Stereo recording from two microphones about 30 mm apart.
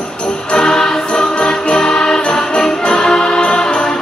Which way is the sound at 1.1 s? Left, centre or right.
Left.